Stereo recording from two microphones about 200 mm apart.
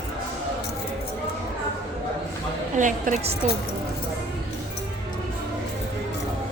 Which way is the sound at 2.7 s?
40° right (ahead or behind).